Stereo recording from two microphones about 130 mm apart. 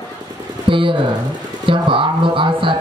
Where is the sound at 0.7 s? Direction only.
40° right (ahead or behind).